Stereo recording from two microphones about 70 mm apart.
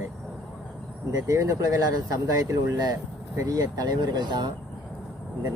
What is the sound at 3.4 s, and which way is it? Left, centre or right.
Speech, right.